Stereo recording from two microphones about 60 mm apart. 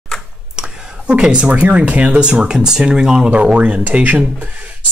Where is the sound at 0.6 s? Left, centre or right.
Centre.